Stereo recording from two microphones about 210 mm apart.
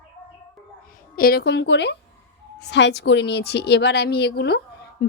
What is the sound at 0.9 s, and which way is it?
A woman's voice, 45° left (ahead or behind).